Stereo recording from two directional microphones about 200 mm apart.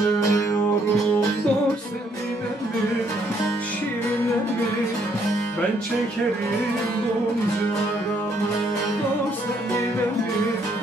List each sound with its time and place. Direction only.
0.2 s music: 15° left (ahead or behind)